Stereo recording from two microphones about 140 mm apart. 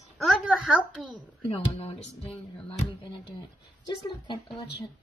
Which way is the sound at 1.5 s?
50° left (ahead or behind).